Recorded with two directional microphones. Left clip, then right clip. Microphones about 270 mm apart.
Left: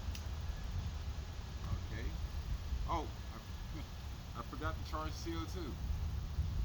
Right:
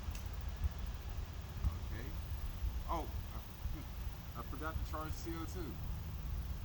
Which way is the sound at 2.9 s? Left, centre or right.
Centre.